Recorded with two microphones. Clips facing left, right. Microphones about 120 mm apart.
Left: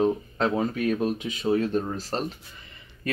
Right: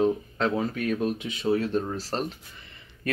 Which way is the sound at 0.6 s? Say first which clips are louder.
Left 2 dB; 25° left (ahead or behind).